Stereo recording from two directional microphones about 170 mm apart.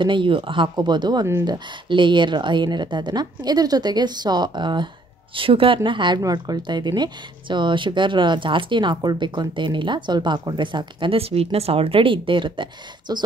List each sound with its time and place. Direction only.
0.0 s a woman's voice: 30° right (ahead or behind)